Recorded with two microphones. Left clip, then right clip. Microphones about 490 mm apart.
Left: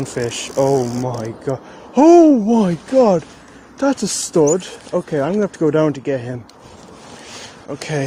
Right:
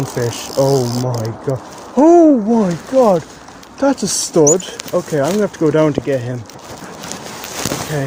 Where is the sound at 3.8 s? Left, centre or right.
Left.